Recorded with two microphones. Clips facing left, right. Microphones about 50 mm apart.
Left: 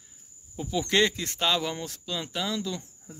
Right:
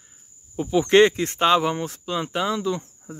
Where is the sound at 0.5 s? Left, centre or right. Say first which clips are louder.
Right 9 dB; right.